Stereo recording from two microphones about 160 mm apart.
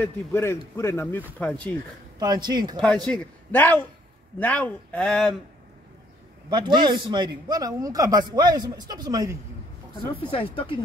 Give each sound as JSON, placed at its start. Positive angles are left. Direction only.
{"t": 0.0, "sound": "a man's voice", "side_deg": 15}
{"t": 2.1, "sound": "a man's voice", "side_deg": -25}
{"t": 2.8, "sound": "a man's voice", "side_deg": 5}
{"t": 6.5, "sound": "a man's voice", "side_deg": -30}
{"t": 10.5, "sound": "speech", "side_deg": 35}